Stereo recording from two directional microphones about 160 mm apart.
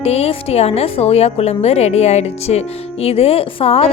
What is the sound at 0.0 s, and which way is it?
A woman's voice, 40° left (ahead or behind).